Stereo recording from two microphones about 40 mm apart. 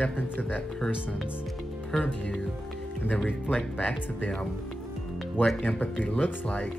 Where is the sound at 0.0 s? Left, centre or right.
Left.